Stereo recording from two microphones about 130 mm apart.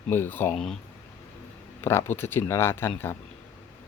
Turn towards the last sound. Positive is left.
turn(degrees=20)  # may be behind; listen again after turning